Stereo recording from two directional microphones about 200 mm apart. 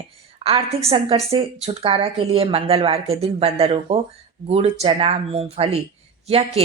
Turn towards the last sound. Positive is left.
turn(degrees=-30)  # may be behind; listen again after turning